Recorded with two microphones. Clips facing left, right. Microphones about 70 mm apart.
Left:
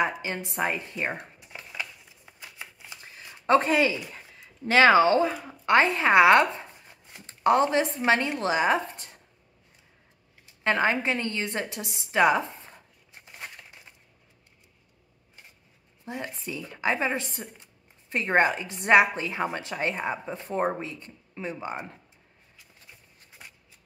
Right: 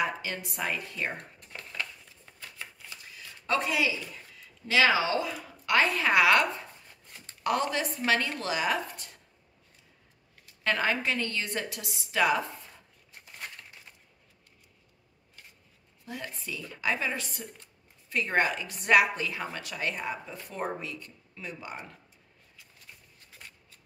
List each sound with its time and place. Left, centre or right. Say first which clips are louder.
0.0 s a woman's voice: left 4 dB; left
1.1 s shuffling cards: left 3 dB; centre; by 3.9 s left
4.6 s speech: left 7 dB; left
10.4 s a sound: left 4 dB; left
16.1 s a woman's voice: left 4 dB; left
23.3 s scissors: left 1 dB; centre